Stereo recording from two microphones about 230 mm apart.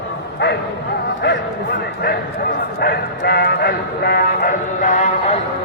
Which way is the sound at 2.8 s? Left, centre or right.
Left.